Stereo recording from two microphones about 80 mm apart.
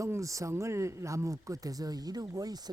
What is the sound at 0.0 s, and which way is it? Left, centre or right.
Speech, right.